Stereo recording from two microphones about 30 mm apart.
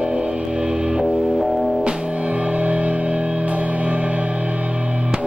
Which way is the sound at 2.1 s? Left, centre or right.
Right.